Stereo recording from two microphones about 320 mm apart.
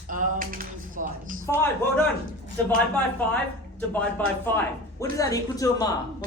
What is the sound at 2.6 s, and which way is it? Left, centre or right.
Speech, centre.